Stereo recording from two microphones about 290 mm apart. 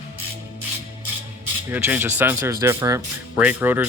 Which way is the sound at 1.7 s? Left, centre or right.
Centre.